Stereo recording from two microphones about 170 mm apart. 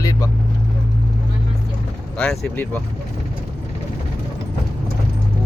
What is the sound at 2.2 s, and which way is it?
Speech, 5° left (ahead or behind).